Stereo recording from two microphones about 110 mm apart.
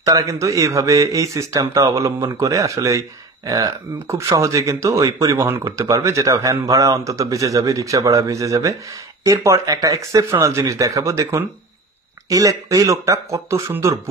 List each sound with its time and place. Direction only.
0.0 s speech: 30° right (ahead or behind)